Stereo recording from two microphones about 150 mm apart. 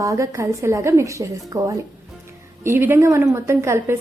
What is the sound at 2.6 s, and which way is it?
A woman's voice, 15° right (ahead or behind).